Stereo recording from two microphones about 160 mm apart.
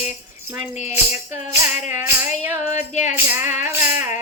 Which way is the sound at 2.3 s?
45° left (ahead or behind).